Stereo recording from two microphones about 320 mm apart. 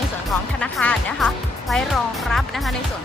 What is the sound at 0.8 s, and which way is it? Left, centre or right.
A woman's voice, centre.